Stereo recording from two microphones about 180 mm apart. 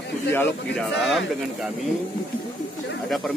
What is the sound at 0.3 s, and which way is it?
Speech, 10° left (ahead or behind).